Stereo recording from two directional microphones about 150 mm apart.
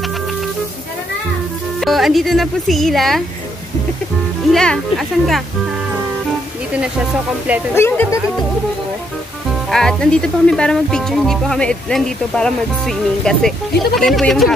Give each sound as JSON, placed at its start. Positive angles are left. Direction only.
{"t": 1.8, "sound": "speech", "side_deg": 0}
{"t": 4.5, "sound": "speech", "side_deg": 0}
{"t": 7.7, "sound": "speech", "side_deg": 15}
{"t": 9.7, "sound": "speech", "side_deg": 5}